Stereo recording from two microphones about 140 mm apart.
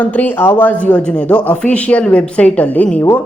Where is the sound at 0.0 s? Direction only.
10° left (ahead or behind).